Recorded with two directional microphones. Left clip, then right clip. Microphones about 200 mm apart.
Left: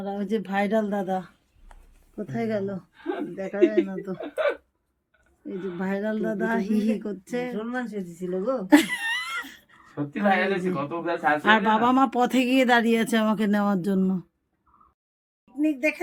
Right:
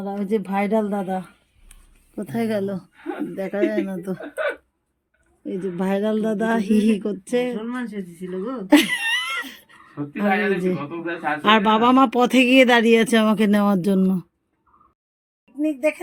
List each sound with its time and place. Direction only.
0.0 s speech: 30° right (ahead or behind)
2.1 s speech: 50° right (ahead or behind)
4.2 s speech: 10° right (ahead or behind)
5.4 s speech: 30° right (ahead or behind)
7.6 s speech: 65° left (ahead or behind)
8.7 s speech: 25° right (ahead or behind)
15.6 s speech: 15° right (ahead or behind)